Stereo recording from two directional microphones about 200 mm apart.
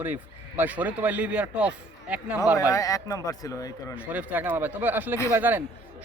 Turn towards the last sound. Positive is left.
turn(degrees=-10)  # may be behind; listen again after turning